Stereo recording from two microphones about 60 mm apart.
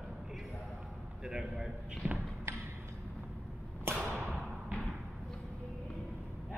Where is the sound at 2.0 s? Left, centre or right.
Centre.